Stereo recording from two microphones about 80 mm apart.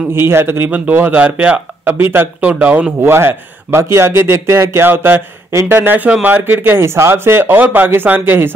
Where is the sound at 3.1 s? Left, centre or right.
Right.